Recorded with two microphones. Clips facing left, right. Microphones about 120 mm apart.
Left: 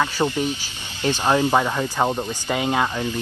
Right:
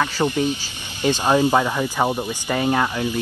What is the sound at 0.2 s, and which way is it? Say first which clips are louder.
Speech: right 2 dB; 15° right (ahead or behind).